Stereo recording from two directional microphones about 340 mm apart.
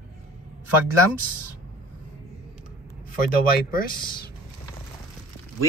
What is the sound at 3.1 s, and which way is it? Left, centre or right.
Speech, left.